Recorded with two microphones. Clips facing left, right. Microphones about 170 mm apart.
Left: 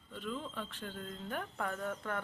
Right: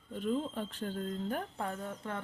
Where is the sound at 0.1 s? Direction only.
40° right (ahead or behind).